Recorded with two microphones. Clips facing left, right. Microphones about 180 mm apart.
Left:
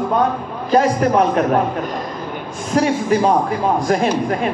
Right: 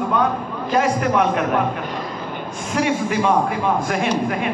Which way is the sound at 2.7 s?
35° left (ahead or behind).